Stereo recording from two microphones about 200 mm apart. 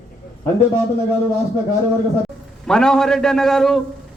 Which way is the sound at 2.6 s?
5° left (ahead or behind).